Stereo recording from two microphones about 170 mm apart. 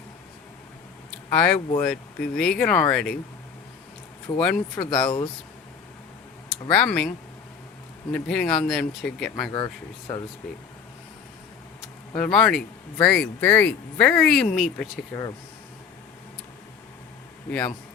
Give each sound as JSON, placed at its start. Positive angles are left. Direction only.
{"t": 1.3, "sound": "speech", "side_deg": 5}
{"t": 4.4, "sound": "speech", "side_deg": 5}
{"t": 5.0, "sound": "speech", "side_deg": 30}
{"t": 6.7, "sound": "speech", "side_deg": 5}
{"t": 8.1, "sound": "speech", "side_deg": 5}
{"t": 12.1, "sound": "speech", "side_deg": 5}
{"t": 17.5, "sound": "speech", "side_deg": 10}